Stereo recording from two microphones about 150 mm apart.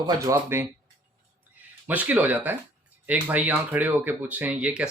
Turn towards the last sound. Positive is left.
turn(degrees=-5)  # may be behind; listen again after turning